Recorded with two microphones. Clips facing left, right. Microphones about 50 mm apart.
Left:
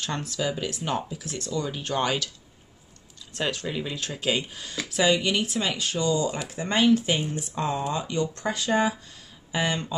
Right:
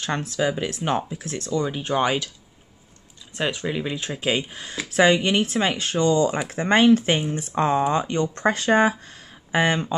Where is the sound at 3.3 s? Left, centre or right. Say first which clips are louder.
Right 3 dB; centre.